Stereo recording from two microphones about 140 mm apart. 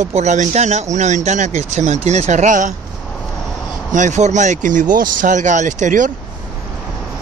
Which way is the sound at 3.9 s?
60° right (ahead or behind).